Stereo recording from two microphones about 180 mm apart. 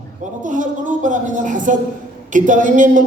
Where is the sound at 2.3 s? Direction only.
45° right (ahead or behind).